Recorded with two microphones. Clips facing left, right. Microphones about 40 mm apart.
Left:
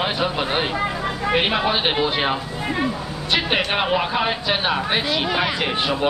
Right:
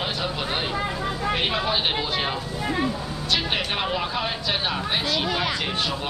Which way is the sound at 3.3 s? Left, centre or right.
Left.